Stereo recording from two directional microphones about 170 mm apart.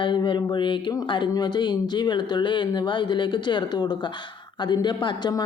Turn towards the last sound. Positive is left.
turn(degrees=25)  # may be behind; listen again after turning